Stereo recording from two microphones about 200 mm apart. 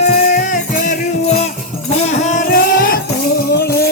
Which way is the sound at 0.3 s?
40° left (ahead or behind).